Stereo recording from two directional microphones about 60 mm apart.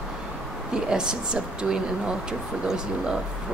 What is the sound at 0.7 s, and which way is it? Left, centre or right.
Speech, centre.